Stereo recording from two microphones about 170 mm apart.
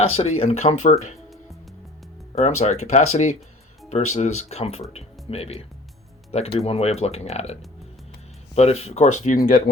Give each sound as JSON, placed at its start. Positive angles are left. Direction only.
{"t": 0.0, "sound": "speech", "side_deg": 35}
{"t": 2.3, "sound": "speech", "side_deg": 40}
{"t": 9.4, "sound": "speech", "side_deg": 60}